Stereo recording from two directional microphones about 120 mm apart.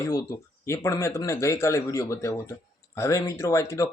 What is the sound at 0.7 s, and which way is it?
Speech, 25° left (ahead or behind).